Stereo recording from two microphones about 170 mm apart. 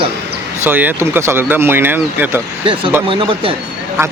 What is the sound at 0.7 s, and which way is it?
Speech, 10° right (ahead or behind).